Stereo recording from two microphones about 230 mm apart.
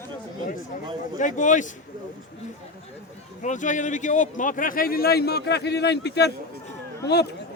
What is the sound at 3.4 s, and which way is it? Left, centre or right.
A man's voice, left.